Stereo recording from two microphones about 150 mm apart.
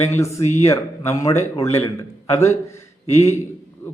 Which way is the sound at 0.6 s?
20° left (ahead or behind).